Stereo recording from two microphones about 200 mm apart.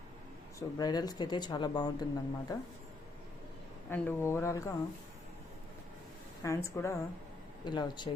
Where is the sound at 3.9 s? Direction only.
10° left (ahead or behind).